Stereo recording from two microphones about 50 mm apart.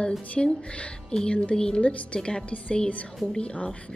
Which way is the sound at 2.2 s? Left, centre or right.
Centre.